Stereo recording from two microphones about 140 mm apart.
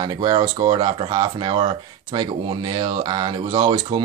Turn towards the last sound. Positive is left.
turn(degrees=-35)  # may be behind; listen again after turning